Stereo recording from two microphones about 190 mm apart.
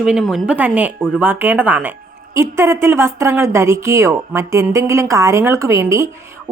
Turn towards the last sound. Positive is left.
turn(degrees=-15)  # may be behind; listen again after turning